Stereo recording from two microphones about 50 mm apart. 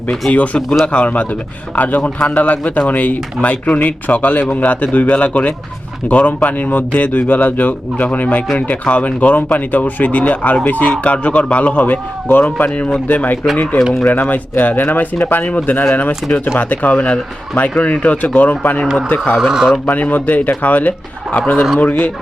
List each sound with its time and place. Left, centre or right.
0.1 s a man's voice: left
12.3 s speech: left
19.4 s speech: centre
19.9 s speech: left